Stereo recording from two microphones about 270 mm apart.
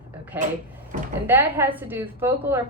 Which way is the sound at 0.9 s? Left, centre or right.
Right.